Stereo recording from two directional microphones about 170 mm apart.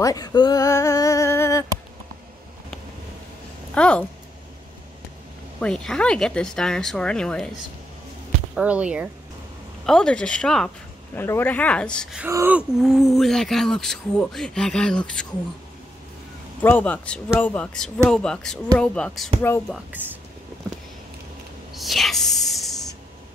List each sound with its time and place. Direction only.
0.0 s a sound: 20° left (ahead or behind)
3.7 s speech: 5° left (ahead or behind)
5.6 s speech: 5° left (ahead or behind)
8.5 s speech: 10° right (ahead or behind)
9.8 s speech: 5° left (ahead or behind)
12.2 s speech: 15° right (ahead or behind); by 15.2 s 5° left (ahead or behind)
16.6 s speech: 10° left (ahead or behind)
20.0 s speech: 10° right (ahead or behind)
21.7 s a sound: centre (ahead or behind)